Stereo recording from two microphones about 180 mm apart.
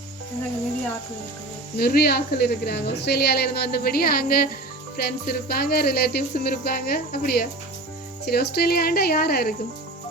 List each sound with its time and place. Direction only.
1.7 s a woman's voice: 60° left (ahead or behind)